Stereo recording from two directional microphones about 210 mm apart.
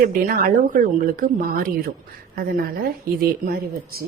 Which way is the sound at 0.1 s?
40° right (ahead or behind).